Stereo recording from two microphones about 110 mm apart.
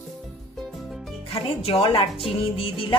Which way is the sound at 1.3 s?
60° left (ahead or behind).